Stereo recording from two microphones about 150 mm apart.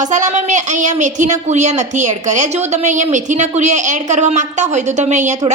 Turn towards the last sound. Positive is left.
turn(degrees=-50)  # may be behind; listen again after turning